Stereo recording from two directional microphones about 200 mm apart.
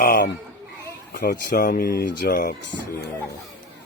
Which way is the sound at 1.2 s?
45° left (ahead or behind).